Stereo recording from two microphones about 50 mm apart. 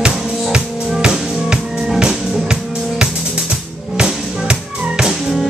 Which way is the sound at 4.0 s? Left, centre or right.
Centre.